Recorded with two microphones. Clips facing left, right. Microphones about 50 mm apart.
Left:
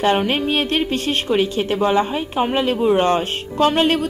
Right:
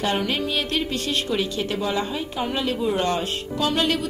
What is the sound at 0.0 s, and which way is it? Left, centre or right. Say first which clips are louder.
A woman's voice: left 6 dB; left.